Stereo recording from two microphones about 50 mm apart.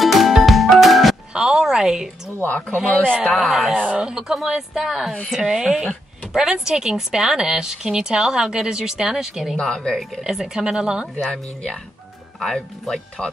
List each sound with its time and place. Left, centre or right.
0.0 s music: centre
1.4 s a sound: centre
2.4 s speech: left
3.3 s speech: centre
3.7 s a woman's voice: centre
9.6 s speech: centre
10.2 s a woman's voice: centre
12.4 s speech: centre